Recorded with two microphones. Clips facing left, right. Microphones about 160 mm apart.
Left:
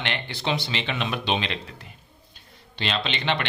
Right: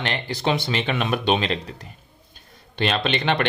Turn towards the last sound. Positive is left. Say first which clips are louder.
# right 4 dB
turn(degrees=-50)  # may be behind; listen again after turning